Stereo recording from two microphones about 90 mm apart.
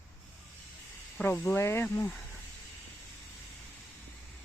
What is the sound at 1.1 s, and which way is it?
Speech, 20° left (ahead or behind).